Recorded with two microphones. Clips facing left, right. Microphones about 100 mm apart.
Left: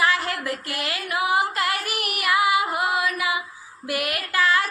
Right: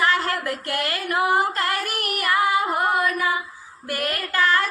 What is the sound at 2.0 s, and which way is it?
Child singing, 45° right (ahead or behind).